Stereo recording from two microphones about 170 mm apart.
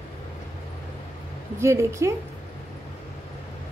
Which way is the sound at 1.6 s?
15° right (ahead or behind).